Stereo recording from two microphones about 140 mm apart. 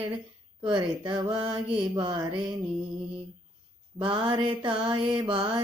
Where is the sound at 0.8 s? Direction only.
35° right (ahead or behind).